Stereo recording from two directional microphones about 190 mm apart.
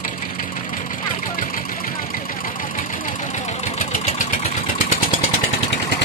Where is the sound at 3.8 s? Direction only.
40° left (ahead or behind).